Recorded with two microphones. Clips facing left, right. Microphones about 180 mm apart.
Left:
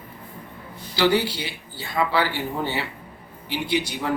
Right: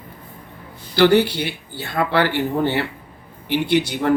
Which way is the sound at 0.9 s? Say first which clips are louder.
Right 6 dB; 65° right (ahead or behind).